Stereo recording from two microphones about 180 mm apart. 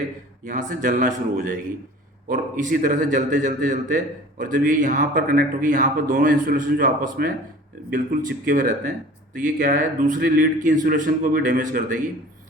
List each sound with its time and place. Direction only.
0.4 s a man's voice: 45° right (ahead or behind)